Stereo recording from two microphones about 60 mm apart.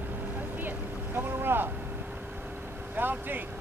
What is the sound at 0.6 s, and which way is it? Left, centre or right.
Boat, right.